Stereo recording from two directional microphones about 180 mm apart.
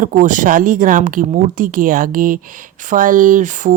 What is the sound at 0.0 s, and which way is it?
Speech, 45° right (ahead or behind).